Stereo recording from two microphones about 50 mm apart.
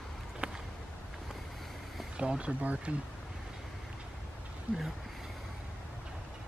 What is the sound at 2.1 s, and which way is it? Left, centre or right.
Speech, right.